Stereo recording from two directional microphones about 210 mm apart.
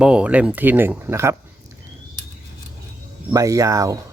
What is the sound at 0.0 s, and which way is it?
Speech, 5° right (ahead or behind).